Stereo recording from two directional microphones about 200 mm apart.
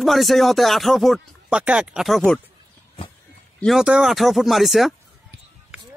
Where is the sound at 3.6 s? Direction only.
Centre (ahead or behind).